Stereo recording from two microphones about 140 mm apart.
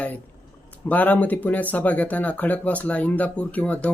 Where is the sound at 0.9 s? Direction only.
10° left (ahead or behind).